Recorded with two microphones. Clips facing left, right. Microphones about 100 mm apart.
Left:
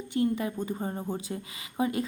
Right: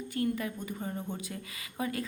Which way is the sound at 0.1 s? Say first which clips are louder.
Left 5 dB; 25° left (ahead or behind).